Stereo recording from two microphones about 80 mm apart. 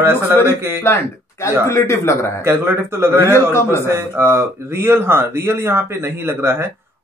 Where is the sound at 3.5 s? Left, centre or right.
Left.